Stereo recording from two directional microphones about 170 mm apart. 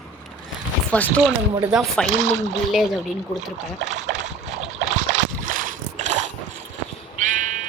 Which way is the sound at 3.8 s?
45° right (ahead or behind).